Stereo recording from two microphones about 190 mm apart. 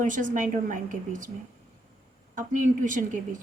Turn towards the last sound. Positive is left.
turn(degrees=-45)  # may be behind; listen again after turning